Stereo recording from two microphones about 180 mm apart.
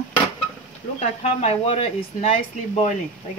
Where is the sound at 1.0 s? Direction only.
35° left (ahead or behind).